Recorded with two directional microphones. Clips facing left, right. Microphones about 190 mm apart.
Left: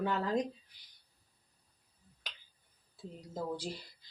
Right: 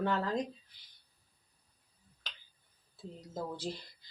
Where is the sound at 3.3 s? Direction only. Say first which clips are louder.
Left 1 dB; 10° left (ahead or behind).